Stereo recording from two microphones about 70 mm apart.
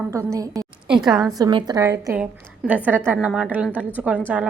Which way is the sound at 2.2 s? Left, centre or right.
Centre.